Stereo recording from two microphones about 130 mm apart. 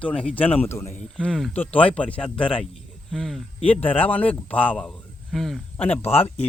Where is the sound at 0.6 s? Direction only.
20° left (ahead or behind).